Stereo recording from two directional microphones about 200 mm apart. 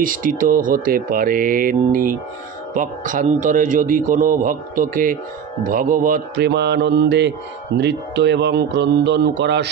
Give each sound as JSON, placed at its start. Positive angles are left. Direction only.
{"t": 0.0, "sound": "a man's voice", "side_deg": -45}